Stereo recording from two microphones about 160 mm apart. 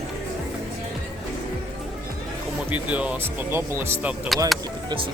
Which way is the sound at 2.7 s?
10° right (ahead or behind).